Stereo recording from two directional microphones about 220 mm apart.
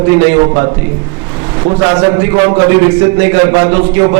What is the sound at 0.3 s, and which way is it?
A man's voice, 20° right (ahead or behind).